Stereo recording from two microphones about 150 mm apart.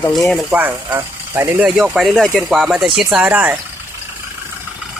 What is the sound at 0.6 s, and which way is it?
Speech, 15° right (ahead or behind).